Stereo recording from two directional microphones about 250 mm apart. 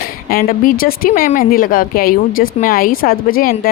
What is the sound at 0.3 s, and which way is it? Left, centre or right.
Speech, left.